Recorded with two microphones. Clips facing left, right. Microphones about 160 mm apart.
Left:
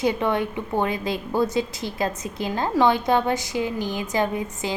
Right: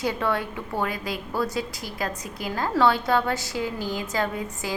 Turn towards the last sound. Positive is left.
turn(degrees=20)  # may be behind; listen again after turning